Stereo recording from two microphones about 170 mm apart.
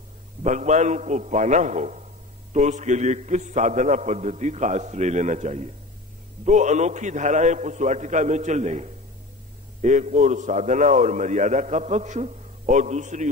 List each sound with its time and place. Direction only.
0.4 s a man's voice: 45° right (ahead or behind)